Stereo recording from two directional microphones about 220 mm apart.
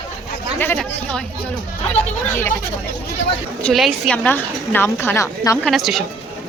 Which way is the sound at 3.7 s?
Centre (ahead or behind).